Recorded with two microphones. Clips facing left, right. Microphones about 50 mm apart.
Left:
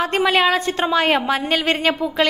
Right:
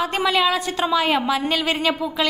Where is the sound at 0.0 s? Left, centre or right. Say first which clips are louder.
Left 3 dB; left.